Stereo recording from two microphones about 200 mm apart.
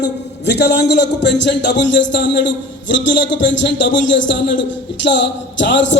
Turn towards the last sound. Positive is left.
turn(degrees=65)  # may be behind; listen again after turning